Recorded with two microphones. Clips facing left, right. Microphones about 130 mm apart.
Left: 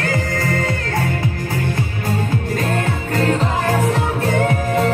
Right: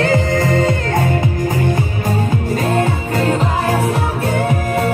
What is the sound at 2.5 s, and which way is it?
Music, 15° right (ahead or behind).